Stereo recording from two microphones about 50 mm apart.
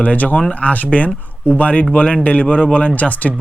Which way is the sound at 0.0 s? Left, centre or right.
Left.